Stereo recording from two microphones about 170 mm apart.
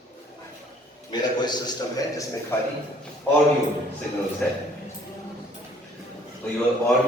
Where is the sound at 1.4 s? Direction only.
25° left (ahead or behind).